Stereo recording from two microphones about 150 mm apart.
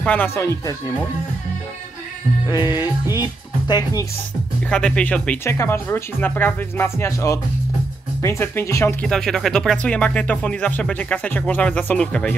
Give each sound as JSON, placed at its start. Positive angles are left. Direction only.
{"t": 0.0, "sound": "speech", "side_deg": 10}
{"t": 2.5, "sound": "speech", "side_deg": 30}
{"t": 4.6, "sound": "speech", "side_deg": 5}
{"t": 9.0, "sound": "speech", "side_deg": 5}